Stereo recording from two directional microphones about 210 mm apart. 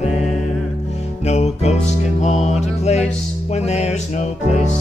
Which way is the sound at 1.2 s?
30° left (ahead or behind).